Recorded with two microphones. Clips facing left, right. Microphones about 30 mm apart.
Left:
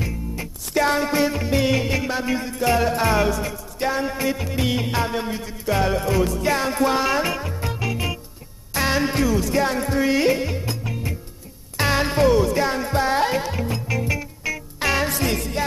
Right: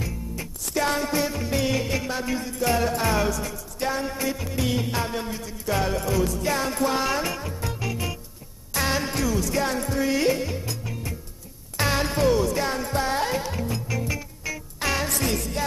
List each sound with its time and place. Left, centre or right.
0.0 s music: centre